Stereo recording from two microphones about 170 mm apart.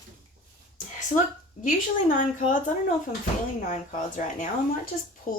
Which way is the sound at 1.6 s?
50° left (ahead or behind).